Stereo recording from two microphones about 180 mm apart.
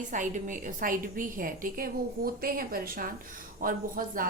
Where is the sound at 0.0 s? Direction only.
45° right (ahead or behind).